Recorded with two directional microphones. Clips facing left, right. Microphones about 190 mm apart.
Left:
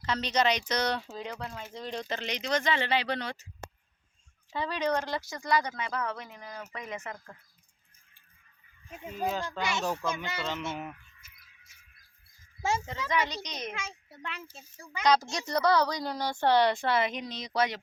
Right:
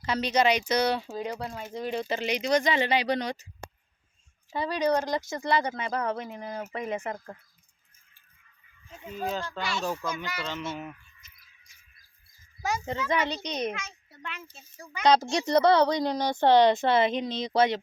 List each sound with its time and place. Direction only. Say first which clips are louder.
0.0 s speech: right 3 dB; 10° right (ahead or behind)
4.5 s a woman's voice: right 4 dB; 15° right (ahead or behind); by 7.3 s 30° right (ahead or behind)
8.9 s speech: even; 10° left (ahead or behind)
11.2 s a sound: even; 10° left (ahead or behind)
12.6 s speech: left 1 dB; 25° left (ahead or behind)
13.1 s a child's voice: right 2 dB; 30° right (ahead or behind)
14.2 s speech: even; 30° left (ahead or behind)
15.0 s a woman's voice: right 4 dB; 30° right (ahead or behind)